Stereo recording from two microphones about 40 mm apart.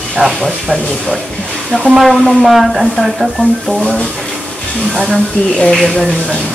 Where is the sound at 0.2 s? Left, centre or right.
Right.